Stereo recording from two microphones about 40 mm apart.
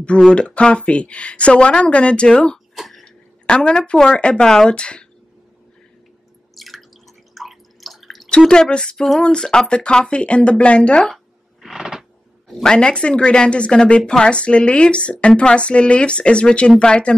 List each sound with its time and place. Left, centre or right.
0.1 s a woman's voice: left
6.5 s drip: centre
8.5 s a woman's voice: left
8.9 s a sound: centre
9.2 s a woman's voice: left
11.6 s a sound: centre
12.7 s a woman's voice: left